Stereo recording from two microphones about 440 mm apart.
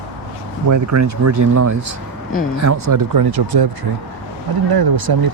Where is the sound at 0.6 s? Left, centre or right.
Right.